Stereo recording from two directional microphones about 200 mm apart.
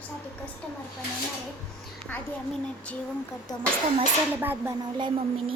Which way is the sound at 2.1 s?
5° left (ahead or behind).